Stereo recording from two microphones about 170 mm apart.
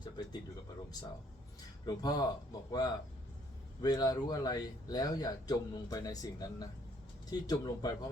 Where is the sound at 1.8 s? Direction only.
20° left (ahead or behind).